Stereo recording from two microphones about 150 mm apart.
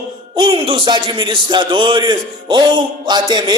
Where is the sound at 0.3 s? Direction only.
35° right (ahead or behind).